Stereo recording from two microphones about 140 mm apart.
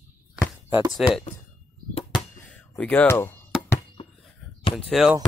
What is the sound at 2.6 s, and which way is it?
Speech, 10° left (ahead or behind).